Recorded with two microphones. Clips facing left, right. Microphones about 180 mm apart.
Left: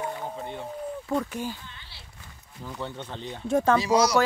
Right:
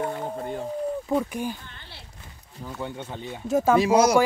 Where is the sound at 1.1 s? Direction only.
15° right (ahead or behind).